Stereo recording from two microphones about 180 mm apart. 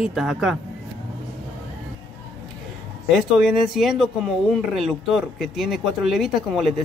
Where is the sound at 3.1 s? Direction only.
Centre (ahead or behind).